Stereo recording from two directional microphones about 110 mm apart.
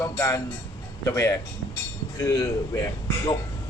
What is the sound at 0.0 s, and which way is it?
A man's voice, 25° left (ahead or behind).